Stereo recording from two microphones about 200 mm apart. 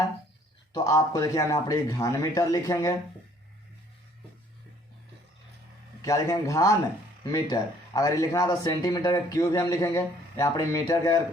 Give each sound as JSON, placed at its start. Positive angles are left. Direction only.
{"t": 0.7, "sound": "speech", "side_deg": 15}
{"t": 6.0, "sound": "speech", "side_deg": 15}